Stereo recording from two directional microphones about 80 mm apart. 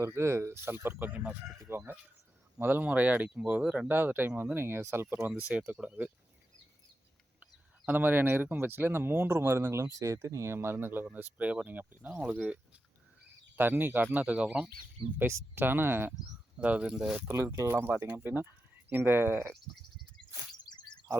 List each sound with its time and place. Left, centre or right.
0.0 s speech: right; by 3.8 s centre
3.8 s speech: right
5.4 s speech: centre
7.9 s speech: right
13.6 s speech: right
15.3 s speech: right
15.6 s speech: right
16.2 s speech: centre
17.6 s speech: right
20.7 s chirp: left